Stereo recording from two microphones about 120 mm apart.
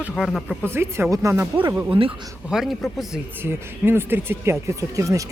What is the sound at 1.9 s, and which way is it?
Speech, 45° right (ahead or behind).